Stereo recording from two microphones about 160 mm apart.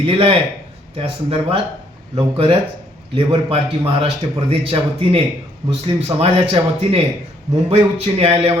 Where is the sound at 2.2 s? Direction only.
35° right (ahead or behind).